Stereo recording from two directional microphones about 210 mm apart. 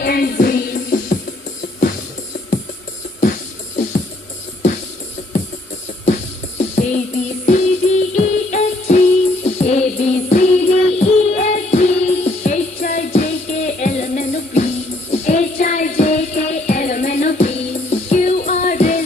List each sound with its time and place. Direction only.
0.0 s music: 45° left (ahead or behind)
3.2 s music: 35° left (ahead or behind)
6.0 s music: 35° left (ahead or behind)